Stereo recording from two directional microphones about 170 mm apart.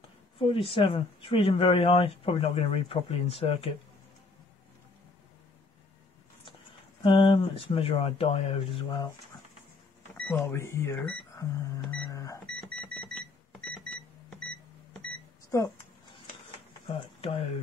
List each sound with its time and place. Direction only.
0.4 s speech: 30° left (ahead or behind)
7.0 s speech: 30° left (ahead or behind)
10.1 s speech: 10° left (ahead or behind)
12.1 s a sound: 20° left (ahead or behind)
12.5 s a sound: centre (ahead or behind)
15.5 s speech: 20° left (ahead or behind)
17.2 s speech: 35° left (ahead or behind)